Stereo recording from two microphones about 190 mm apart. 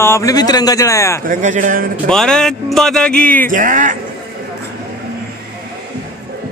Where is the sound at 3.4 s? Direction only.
45° right (ahead or behind).